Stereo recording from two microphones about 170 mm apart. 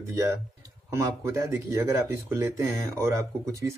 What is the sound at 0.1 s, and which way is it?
Speech, 15° right (ahead or behind).